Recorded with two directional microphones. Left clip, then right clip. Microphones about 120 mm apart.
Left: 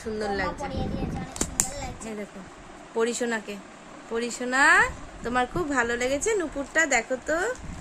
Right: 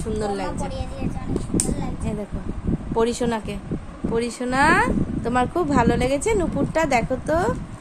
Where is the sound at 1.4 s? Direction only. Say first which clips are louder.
Right 1 dB; 60° left (ahead or behind).